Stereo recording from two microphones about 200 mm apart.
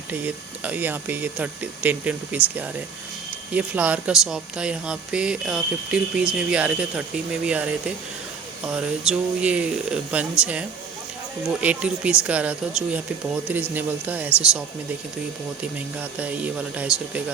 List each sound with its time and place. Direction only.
0.1 s speech: 10° right (ahead or behind)
11.6 s speech: 5° right (ahead or behind)
16.0 s speech: 5° right (ahead or behind)